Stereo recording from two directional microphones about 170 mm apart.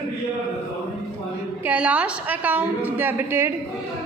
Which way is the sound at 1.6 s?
10° right (ahead or behind).